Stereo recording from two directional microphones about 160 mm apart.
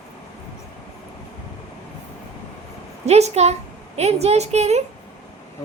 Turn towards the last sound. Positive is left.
turn(degrees=-45)  # may be behind; listen again after turning